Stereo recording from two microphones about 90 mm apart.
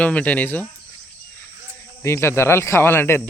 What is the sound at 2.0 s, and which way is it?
Speech, 30° left (ahead or behind).